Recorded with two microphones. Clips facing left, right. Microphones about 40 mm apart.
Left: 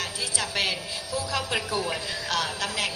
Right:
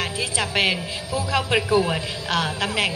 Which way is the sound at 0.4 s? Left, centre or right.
Right.